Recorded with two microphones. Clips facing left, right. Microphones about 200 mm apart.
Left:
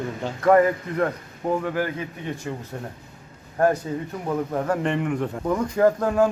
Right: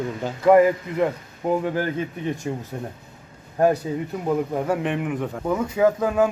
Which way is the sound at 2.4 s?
25° right (ahead or behind).